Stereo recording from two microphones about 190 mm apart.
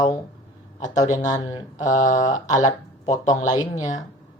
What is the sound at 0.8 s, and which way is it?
Speech, 40° left (ahead or behind).